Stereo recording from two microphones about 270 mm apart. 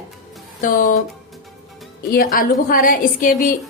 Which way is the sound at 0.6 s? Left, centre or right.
Left.